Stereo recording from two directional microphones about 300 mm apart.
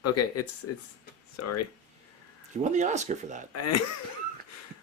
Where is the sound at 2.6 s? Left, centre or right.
Right.